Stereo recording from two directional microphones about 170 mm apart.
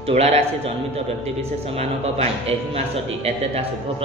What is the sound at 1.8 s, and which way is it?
A man's voice, 40° right (ahead or behind).